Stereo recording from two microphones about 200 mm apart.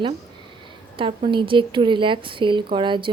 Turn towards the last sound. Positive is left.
turn(degrees=-25)  # may be behind; listen again after turning